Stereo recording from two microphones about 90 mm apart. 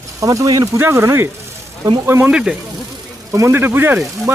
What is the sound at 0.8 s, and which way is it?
Speech, 30° right (ahead or behind).